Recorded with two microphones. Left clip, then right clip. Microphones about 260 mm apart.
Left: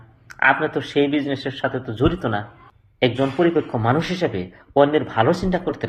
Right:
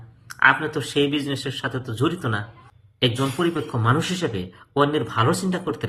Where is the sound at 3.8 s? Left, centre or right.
Centre.